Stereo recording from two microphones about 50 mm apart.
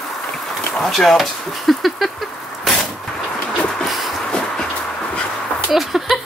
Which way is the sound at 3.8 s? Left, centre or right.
Centre.